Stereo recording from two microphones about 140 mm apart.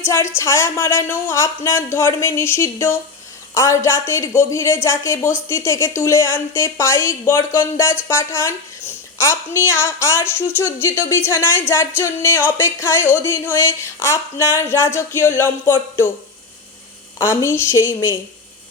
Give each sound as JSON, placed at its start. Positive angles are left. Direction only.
{"t": 0.0, "sound": "a woman's voice", "side_deg": 20}
{"t": 17.2, "sound": "a woman's voice", "side_deg": 20}